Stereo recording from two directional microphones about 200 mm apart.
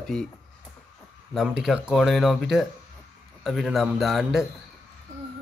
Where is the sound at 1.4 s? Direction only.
5° right (ahead or behind).